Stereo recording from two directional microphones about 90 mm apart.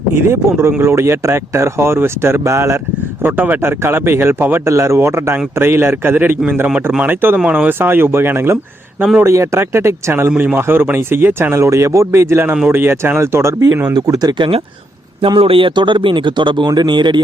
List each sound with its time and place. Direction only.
0.1 s speech: 25° right (ahead or behind)
3.2 s speech: 20° right (ahead or behind)
13.9 s speech: 50° right (ahead or behind); by 14.6 s 65° right (ahead or behind)
15.4 s speech: 90° right; by 17.2 s 55° right (ahead or behind)